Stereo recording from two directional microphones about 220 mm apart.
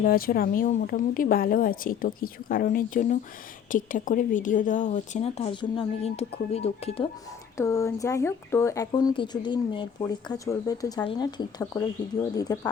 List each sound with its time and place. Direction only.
0.0 s a woman's voice: 40° left (ahead or behind)
7.5 s speech: 10° left (ahead or behind)